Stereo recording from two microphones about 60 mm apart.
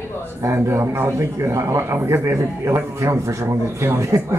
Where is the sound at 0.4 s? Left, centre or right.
Right.